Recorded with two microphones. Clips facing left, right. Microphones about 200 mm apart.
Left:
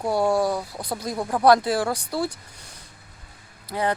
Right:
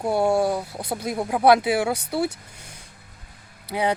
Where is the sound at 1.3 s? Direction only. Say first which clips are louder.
Even; 10° right (ahead or behind).